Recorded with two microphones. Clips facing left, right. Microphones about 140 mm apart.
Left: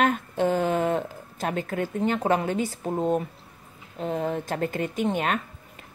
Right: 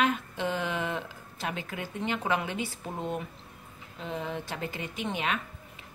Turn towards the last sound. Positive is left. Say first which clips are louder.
# left 6 dB
turn(degrees=45)  # may be behind; listen again after turning